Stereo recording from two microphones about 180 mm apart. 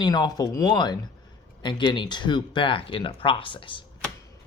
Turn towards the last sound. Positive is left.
turn(degrees=30)  # may be behind; listen again after turning